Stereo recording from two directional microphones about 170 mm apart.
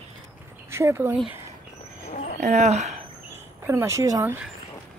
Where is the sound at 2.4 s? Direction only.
45° right (ahead or behind).